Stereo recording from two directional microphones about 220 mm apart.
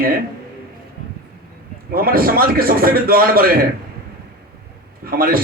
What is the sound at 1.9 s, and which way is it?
A man's voice, 40° right (ahead or behind).